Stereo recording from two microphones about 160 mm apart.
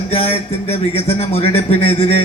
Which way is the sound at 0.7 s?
40° left (ahead or behind).